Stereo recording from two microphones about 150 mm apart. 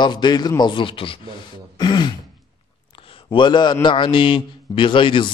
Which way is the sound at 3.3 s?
30° left (ahead or behind).